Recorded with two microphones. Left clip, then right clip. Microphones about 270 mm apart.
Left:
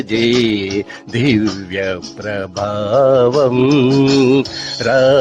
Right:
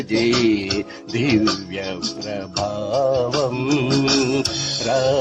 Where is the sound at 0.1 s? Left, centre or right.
Left.